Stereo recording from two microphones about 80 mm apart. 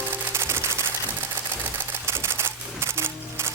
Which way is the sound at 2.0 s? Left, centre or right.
Right.